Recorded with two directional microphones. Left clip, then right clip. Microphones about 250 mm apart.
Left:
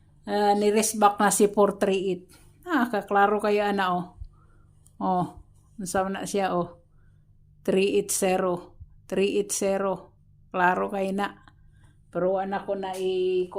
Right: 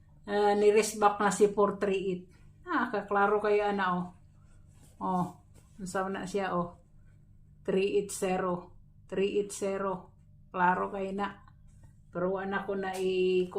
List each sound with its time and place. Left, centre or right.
0.3 s speech: left